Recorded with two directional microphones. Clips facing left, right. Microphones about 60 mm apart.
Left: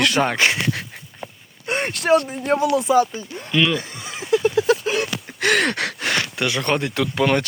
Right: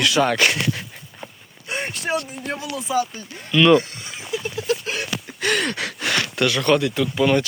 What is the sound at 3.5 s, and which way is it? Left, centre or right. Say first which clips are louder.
Speech: right 2 dB; left.